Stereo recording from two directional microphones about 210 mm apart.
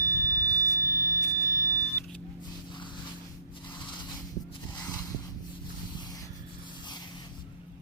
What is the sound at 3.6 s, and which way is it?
Rub, 20° left (ahead or behind).